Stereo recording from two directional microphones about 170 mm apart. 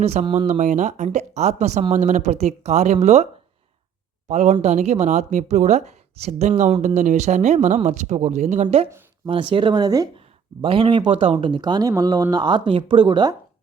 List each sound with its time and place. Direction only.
0.0 s speech: 40° right (ahead or behind)
4.3 s a woman's voice: 40° right (ahead or behind); by 10.1 s 20° right (ahead or behind)
10.2 s speech: 30° right (ahead or behind)